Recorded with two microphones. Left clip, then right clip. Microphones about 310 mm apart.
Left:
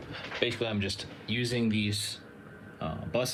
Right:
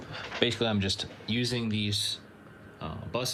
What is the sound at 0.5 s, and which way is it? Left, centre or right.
Speech, right.